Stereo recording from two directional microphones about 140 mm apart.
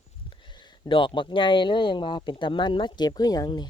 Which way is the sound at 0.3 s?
35° left (ahead or behind).